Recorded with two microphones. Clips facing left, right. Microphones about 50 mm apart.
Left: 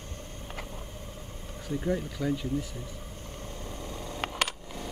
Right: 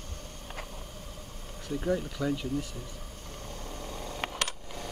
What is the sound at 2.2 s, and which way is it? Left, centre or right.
Speech, left.